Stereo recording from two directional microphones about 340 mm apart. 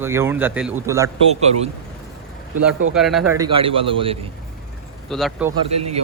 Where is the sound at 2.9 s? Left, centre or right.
Centre.